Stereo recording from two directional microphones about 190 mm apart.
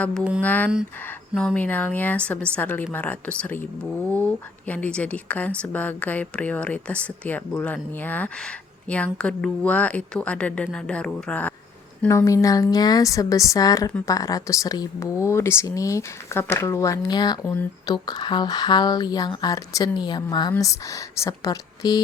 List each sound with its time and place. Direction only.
0.0 s a sound: 5° left (ahead or behind)
0.4 s speech: 10° left (ahead or behind)
17.4 s speech: 10° left (ahead or behind)
17.9 s speech: 20° left (ahead or behind)